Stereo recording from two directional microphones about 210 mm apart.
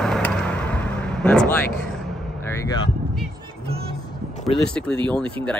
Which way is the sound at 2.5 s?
15° left (ahead or behind).